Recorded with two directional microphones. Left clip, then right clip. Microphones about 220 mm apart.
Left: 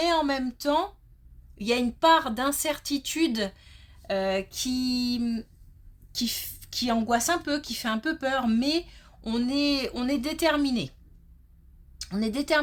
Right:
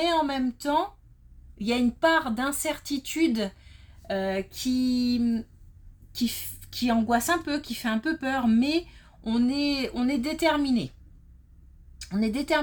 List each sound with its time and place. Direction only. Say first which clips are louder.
0.0 s a woman's voice: even; 30° left (ahead or behind)
11.9 s a woman's voice: right 1 dB; 30° left (ahead or behind)